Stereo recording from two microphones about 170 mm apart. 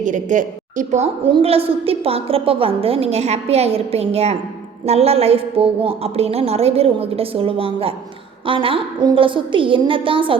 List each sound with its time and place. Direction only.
0.0 s a woman's voice: 50° right (ahead or behind); by 10.3 s 30° right (ahead or behind)